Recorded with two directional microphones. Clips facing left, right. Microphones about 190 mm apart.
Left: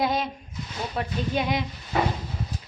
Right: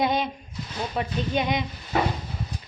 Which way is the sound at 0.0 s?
Centre (ahead or behind).